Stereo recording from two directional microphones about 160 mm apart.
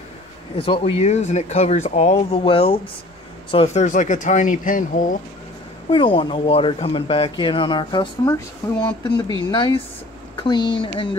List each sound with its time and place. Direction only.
0.6 s speech: 35° left (ahead or behind); by 5.0 s 55° left (ahead or behind)
5.9 s speech: 30° left (ahead or behind)